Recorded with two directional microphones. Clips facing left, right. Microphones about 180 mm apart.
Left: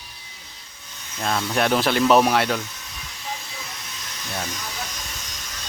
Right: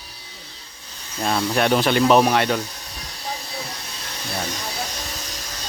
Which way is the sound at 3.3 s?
35° right (ahead or behind).